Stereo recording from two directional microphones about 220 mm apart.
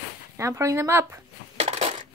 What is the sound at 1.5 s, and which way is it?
Crushing, 25° right (ahead or behind).